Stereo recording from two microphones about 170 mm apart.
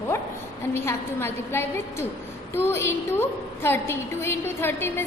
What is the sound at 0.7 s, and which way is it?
A woman's voice, 15° left (ahead or behind).